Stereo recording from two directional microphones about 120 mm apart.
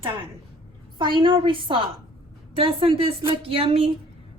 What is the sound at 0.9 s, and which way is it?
A woman's voice, 45° right (ahead or behind).